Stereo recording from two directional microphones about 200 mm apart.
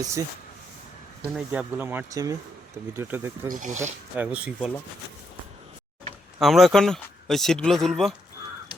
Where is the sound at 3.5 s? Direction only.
40° right (ahead or behind).